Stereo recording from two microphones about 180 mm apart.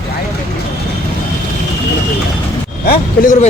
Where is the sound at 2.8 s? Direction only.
55° left (ahead or behind).